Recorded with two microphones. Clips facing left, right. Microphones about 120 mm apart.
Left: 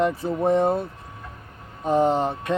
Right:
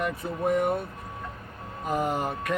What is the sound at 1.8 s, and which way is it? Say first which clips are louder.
Speech: left 7 dB; 25° left (ahead or behind).